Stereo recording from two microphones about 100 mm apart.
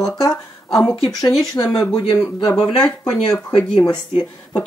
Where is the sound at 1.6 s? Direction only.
25° left (ahead or behind).